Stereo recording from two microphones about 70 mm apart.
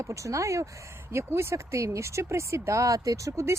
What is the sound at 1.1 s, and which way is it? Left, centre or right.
Speech, right.